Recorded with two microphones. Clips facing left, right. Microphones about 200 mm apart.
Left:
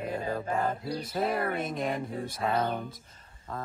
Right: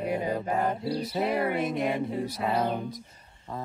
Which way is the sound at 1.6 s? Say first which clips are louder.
Right 4 dB; 10° right (ahead or behind).